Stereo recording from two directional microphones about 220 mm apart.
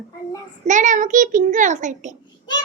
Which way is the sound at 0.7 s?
35° right (ahead or behind).